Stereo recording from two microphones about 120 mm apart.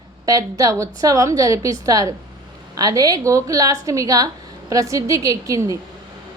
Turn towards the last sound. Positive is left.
turn(degrees=-30)  # may be behind; listen again after turning